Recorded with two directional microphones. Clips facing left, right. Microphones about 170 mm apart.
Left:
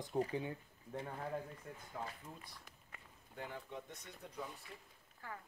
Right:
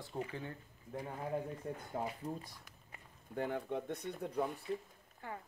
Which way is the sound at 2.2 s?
40° right (ahead or behind).